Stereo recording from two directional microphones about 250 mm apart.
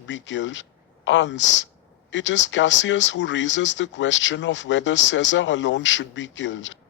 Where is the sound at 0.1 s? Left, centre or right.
Left.